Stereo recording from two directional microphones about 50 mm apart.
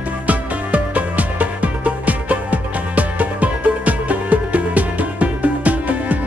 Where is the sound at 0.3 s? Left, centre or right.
Right.